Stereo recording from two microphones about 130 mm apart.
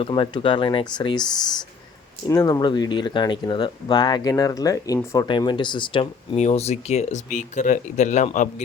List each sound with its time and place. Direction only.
0.0 s speech: 45° left (ahead or behind)
2.2 s speech: 25° left (ahead or behind); by 6.4 s 40° left (ahead or behind)
6.4 s speech: 55° left (ahead or behind)